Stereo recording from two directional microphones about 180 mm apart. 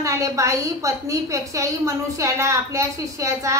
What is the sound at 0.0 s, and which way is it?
Speech, 15° right (ahead or behind).